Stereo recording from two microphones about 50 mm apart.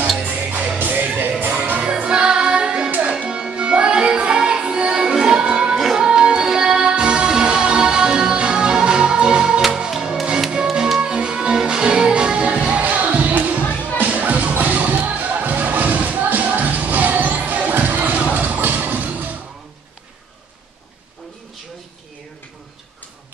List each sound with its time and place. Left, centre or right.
0.2 s music: right
1.8 s music: centre
14.5 s a sound: right